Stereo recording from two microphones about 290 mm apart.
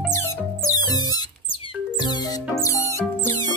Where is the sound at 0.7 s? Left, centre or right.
Centre.